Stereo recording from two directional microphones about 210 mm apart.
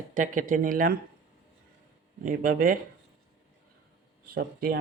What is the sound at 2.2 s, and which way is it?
Speech, 40° right (ahead or behind).